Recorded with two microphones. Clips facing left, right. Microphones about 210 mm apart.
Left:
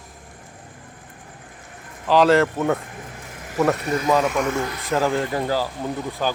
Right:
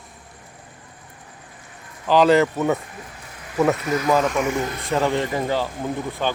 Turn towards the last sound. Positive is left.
turn(degrees=5)  # may be behind; listen again after turning